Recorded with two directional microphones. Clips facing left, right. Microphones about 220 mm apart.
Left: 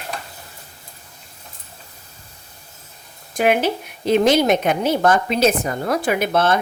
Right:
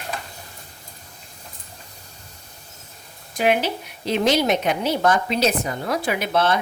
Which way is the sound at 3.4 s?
50° left (ahead or behind).